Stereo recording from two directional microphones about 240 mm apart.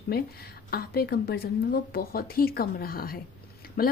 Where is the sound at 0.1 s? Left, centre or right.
Left.